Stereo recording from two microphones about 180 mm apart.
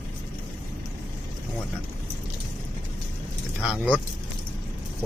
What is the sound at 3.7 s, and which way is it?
Speech, 5° left (ahead or behind).